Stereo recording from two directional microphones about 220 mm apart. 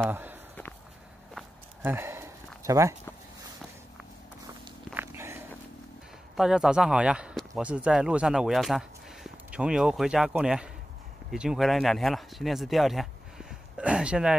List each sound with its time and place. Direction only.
0.1 s walk: 10° right (ahead or behind)
1.3 s a sound: 10° right (ahead or behind)
4.9 s walk: 10° right (ahead or behind)
6.3 s speech: centre (ahead or behind)